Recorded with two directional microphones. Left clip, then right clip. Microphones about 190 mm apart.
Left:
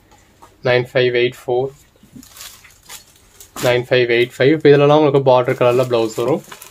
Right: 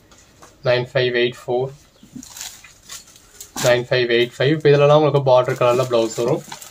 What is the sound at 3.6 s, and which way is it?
Speech, 55° left (ahead or behind).